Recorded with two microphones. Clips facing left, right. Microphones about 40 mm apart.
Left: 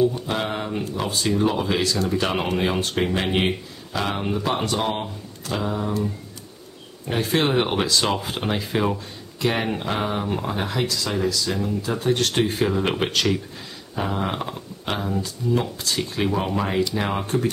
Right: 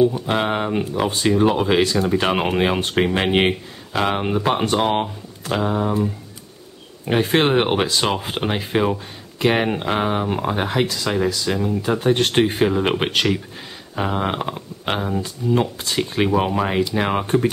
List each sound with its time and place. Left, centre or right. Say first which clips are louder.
0.3 s speech: right 5 dB; right
7.1 s speech: right 4 dB; right